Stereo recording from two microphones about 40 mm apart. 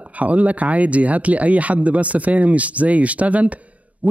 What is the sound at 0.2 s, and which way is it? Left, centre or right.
Speech, right.